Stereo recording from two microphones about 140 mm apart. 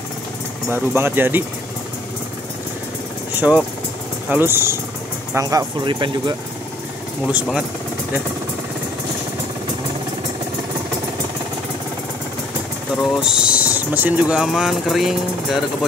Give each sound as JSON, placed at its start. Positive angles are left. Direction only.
{"t": 0.7, "sound": "speech", "side_deg": -15}
{"t": 3.3, "sound": "speech", "side_deg": -10}
{"t": 13.0, "sound": "speech", "side_deg": 0}